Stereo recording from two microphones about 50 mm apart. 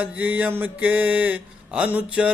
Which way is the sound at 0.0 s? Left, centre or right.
Right.